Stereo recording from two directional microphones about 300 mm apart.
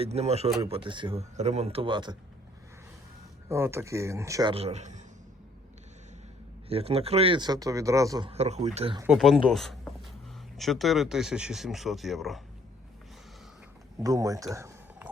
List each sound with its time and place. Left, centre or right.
0.0 s speech: right
3.5 s speech: centre
6.7 s speech: centre
9.0 s speech: centre
14.0 s speech: centre